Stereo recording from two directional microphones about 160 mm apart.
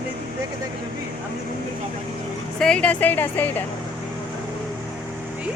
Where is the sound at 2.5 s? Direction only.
5° left (ahead or behind).